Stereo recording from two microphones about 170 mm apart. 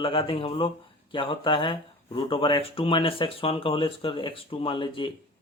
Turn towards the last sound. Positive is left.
turn(degrees=30)  # may be behind; listen again after turning